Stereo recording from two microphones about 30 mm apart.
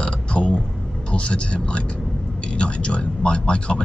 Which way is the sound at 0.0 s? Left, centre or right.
Left.